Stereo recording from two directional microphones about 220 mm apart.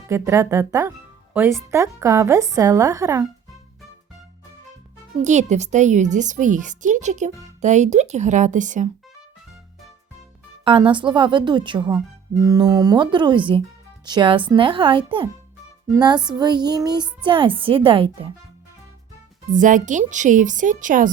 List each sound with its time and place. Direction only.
0.1 s speech: 15° right (ahead or behind)
5.2 s a woman's voice: 30° right (ahead or behind)
10.6 s speech: 25° right (ahead or behind)
19.5 s a woman's voice: 35° right (ahead or behind)